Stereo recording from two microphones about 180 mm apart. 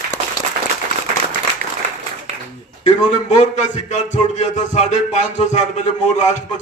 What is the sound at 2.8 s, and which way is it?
A man's voice, 40° left (ahead or behind).